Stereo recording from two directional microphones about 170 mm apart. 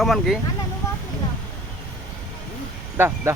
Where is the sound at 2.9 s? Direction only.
15° right (ahead or behind).